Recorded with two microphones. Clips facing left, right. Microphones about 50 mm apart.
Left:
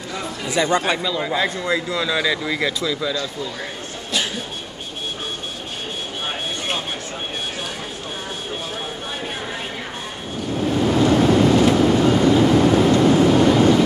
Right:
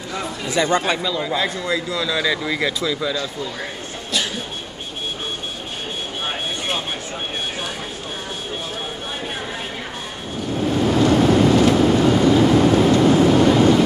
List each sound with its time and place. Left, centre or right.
0.5 s speech: centre
1.2 s a man's voice: left
2.2 s speech: centre
10.5 s vehicle: centre
12.8 s a sound: centre